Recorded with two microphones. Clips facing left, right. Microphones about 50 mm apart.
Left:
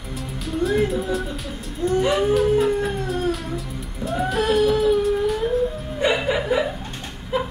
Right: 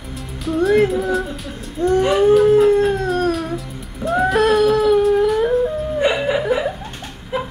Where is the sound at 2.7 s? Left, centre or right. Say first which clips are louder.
Right 7 dB; right.